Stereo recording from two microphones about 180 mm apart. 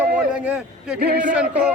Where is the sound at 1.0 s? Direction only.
60° right (ahead or behind).